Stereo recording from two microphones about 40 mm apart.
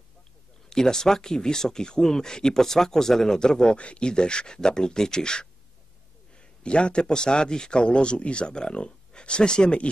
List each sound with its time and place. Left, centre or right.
0.7 s speech: centre
6.6 s a man's voice: left